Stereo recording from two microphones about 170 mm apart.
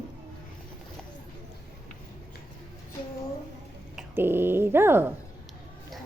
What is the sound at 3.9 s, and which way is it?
Speech, 15° right (ahead or behind).